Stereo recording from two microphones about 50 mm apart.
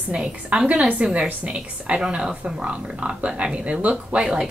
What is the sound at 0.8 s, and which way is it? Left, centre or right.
A woman's voice, right.